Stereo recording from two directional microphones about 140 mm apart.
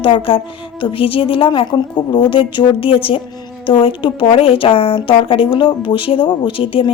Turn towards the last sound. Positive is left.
turn(degrees=40)  # may be behind; listen again after turning